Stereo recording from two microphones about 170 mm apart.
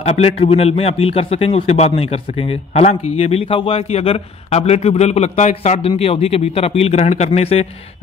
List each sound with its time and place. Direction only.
0.0 s a man's voice: 35° left (ahead or behind)